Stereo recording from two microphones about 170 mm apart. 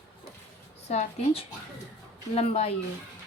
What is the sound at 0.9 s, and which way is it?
Speech, 40° left (ahead or behind).